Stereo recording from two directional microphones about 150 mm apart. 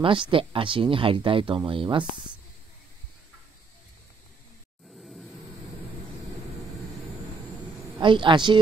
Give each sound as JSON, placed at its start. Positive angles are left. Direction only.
{"t": 0.0, "sound": "speech", "side_deg": -35}
{"t": 4.9, "sound": "vehicle", "side_deg": 0}
{"t": 8.0, "sound": "speech", "side_deg": -35}